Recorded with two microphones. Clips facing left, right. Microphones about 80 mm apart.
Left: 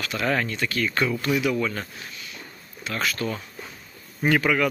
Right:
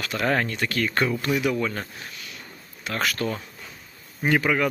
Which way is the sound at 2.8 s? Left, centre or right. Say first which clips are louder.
Right 1 dB; right.